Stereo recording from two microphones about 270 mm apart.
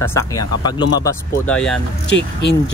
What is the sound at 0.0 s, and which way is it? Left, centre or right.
Speech, centre.